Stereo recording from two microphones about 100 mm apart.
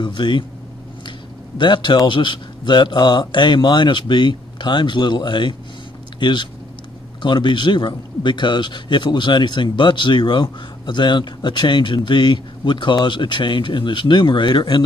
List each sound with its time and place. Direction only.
0.0 s a man's voice: 50° left (ahead or behind)
1.6 s a man's voice: 50° left (ahead or behind)